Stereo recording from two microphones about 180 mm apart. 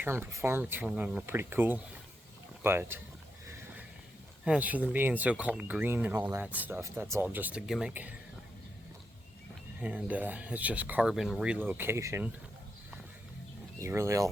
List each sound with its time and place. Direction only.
0.0 s speech: 15° right (ahead or behind)
4.4 s speech: 5° right (ahead or behind)
9.8 s speech: 10° right (ahead or behind)
13.8 s speech: 15° right (ahead or behind)